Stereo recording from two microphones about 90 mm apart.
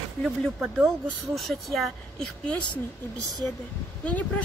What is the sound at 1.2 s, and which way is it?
Speech, centre (ahead or behind).